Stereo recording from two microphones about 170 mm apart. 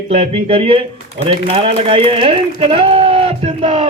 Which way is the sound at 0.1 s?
35° right (ahead or behind).